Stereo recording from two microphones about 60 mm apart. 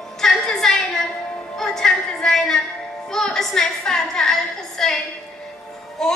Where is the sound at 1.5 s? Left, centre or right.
Centre.